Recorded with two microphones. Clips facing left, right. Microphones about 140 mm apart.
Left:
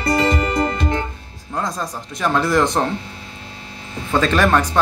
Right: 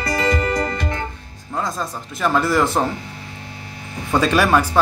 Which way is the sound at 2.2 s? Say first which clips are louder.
Even; centre (ahead or behind).